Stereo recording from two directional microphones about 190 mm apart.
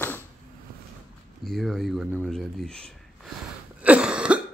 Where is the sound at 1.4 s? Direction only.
Centre (ahead or behind).